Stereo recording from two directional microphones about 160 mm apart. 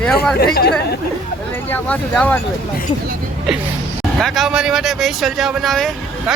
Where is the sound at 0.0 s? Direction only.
5° left (ahead or behind).